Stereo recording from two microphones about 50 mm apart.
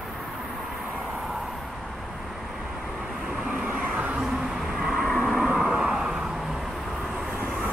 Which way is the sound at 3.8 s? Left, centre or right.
Right.